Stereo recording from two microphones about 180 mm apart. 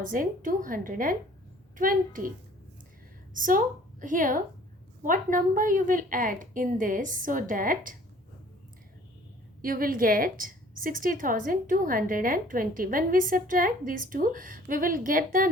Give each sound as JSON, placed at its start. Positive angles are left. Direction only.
{"t": 0.0, "sound": "a woman's voice", "side_deg": -50}
{"t": 3.3, "sound": "a woman's voice", "side_deg": -50}
{"t": 9.6, "sound": "a woman's voice", "side_deg": -50}